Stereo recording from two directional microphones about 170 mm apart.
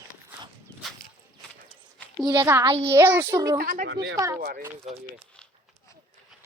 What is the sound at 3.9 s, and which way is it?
Speech, 80° right.